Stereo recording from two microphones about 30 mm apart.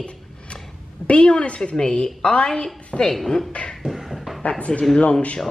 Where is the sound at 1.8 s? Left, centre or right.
Left.